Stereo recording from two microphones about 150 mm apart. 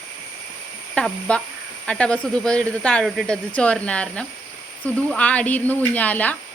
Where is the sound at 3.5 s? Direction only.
10° left (ahead or behind).